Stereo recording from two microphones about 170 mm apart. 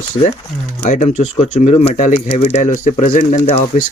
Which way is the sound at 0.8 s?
45° left (ahead or behind).